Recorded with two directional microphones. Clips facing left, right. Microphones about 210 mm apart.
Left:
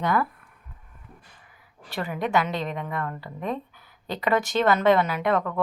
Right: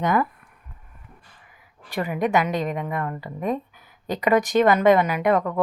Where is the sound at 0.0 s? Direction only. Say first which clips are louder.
Right 3 dB; 20° right (ahead or behind).